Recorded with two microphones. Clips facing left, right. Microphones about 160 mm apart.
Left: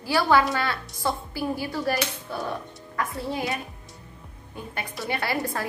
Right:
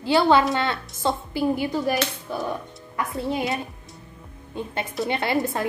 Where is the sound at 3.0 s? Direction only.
20° right (ahead or behind).